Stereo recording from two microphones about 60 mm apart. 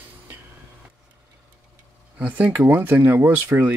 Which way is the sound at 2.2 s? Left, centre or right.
Right.